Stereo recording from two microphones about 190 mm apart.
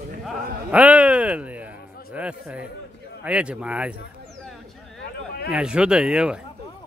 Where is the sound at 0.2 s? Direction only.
5° right (ahead or behind).